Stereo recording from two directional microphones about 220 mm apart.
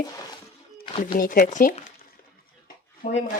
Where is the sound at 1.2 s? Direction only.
40° left (ahead or behind).